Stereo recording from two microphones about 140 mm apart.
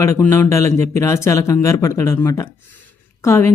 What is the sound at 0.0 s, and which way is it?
Speech, 20° left (ahead or behind).